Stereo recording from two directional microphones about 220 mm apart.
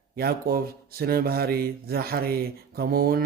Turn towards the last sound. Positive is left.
turn(degrees=-40)  # may be behind; listen again after turning